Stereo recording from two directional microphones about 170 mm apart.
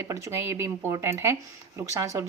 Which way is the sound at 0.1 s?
15° right (ahead or behind).